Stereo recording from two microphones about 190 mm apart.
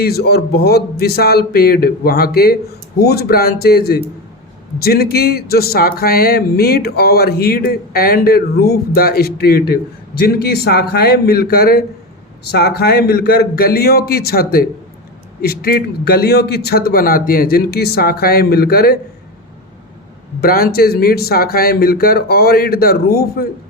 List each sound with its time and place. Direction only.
0.0 s a man's voice: 55° left (ahead or behind)
20.4 s speech: 50° left (ahead or behind)